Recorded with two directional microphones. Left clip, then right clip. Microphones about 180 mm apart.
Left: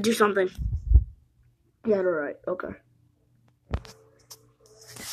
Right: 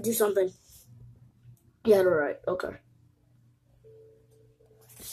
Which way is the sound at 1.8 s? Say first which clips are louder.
Right 3 dB; 10° left (ahead or behind).